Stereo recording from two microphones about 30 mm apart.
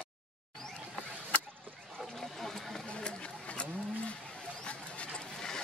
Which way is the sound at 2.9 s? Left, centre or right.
Left.